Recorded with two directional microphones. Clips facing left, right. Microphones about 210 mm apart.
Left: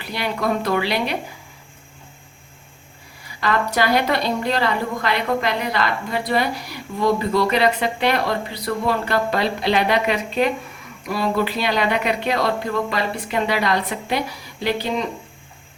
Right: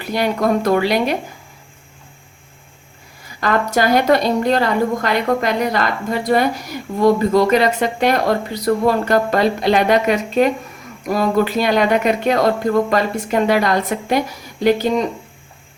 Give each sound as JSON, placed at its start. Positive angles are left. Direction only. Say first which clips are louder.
{"t": 0.0, "sound": "speech", "louder": "right 6 dB", "side_deg": -45}
{"t": 3.4, "sound": "speech", "louder": "right 3 dB", "side_deg": -45}